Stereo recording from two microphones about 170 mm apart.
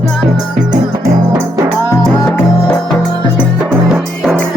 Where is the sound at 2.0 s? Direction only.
5° left (ahead or behind).